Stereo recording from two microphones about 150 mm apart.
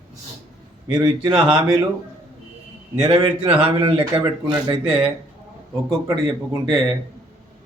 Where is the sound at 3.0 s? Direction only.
40° right (ahead or behind).